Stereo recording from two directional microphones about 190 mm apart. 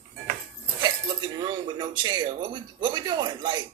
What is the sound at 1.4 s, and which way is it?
Speech, 25° right (ahead or behind).